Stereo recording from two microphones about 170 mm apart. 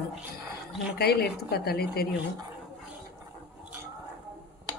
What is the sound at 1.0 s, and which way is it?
A woman's voice, 70° left (ahead or behind).